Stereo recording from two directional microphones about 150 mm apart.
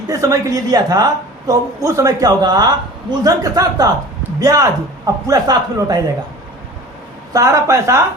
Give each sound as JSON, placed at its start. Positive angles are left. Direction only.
{"t": 0.1, "sound": "a woman's voice", "side_deg": -20}
{"t": 7.3, "sound": "a woman's voice", "side_deg": -20}